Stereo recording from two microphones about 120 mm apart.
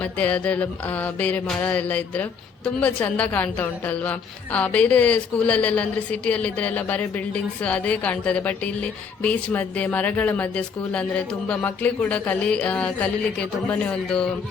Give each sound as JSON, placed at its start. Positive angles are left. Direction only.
{"t": 0.0, "sound": "a woman's voice", "side_deg": 10}